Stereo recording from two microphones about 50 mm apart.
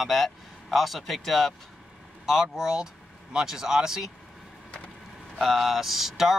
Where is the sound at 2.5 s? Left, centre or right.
Centre.